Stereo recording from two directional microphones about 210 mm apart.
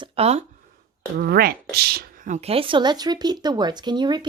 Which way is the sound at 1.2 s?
45° right (ahead or behind).